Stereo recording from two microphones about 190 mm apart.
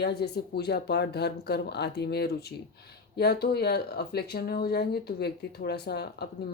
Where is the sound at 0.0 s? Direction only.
60° left (ahead or behind).